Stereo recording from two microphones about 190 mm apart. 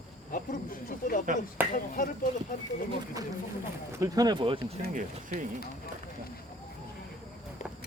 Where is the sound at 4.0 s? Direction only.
20° right (ahead or behind).